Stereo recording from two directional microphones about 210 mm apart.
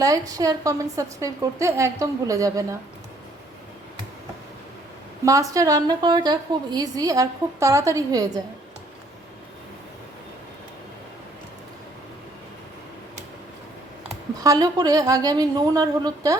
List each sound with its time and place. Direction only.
0.0 s a woman's voice: 15° right (ahead or behind)
5.2 s a woman's voice: 15° right (ahead or behind)
14.4 s a woman's voice: 15° right (ahead or behind)